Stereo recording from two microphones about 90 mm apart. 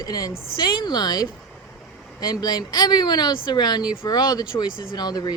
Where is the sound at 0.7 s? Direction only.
60° left (ahead or behind).